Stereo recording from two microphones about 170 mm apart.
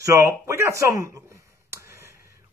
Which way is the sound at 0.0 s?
20° right (ahead or behind).